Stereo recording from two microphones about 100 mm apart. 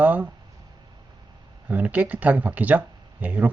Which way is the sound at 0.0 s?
15° right (ahead or behind).